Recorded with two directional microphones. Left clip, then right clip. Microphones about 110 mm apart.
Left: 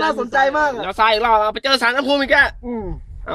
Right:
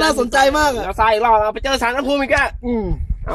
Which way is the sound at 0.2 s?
30° right (ahead or behind).